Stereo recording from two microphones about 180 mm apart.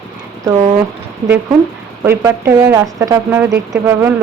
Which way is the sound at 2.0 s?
15° right (ahead or behind).